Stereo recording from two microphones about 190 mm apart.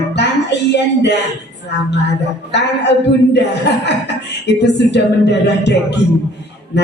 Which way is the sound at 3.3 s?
65° left (ahead or behind).